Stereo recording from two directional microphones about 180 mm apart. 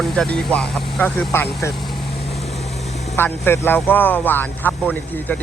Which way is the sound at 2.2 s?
35° left (ahead or behind).